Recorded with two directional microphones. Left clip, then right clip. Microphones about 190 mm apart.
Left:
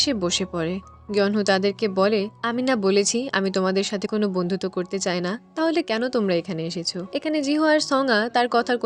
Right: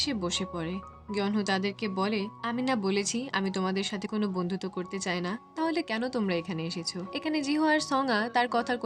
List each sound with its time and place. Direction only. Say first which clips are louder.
0.0 s speech: left 8 dB; 35° left (ahead or behind)